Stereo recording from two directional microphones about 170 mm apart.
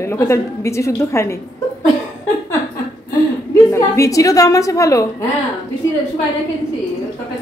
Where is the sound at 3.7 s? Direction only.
15° left (ahead or behind).